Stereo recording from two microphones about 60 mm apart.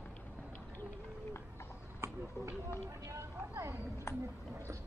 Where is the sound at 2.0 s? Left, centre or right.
Right.